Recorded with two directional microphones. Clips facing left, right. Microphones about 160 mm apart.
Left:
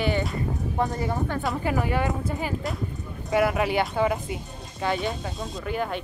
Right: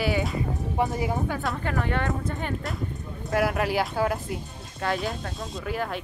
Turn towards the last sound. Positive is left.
turn(degrees=0)  # may be behind; listen again after turning